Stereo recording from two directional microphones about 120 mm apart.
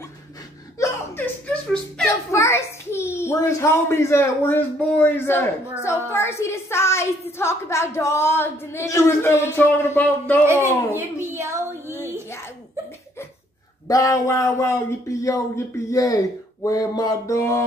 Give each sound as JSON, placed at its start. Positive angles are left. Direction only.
{"t": 0.7, "sound": "chuckle", "side_deg": 20}
{"t": 2.0, "sound": "a child's voice", "side_deg": 25}
{"t": 10.4, "sound": "a man's voice", "side_deg": -20}
{"t": 11.0, "sound": "a sound", "side_deg": -20}
{"t": 13.8, "sound": "a woman's voice", "side_deg": 30}